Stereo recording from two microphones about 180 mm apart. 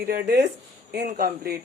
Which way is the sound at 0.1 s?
60° right (ahead or behind).